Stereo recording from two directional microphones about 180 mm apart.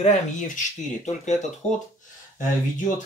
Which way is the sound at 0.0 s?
45° left (ahead or behind).